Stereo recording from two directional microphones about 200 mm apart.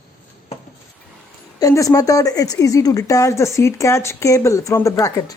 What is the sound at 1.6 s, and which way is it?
Speech, 15° left (ahead or behind).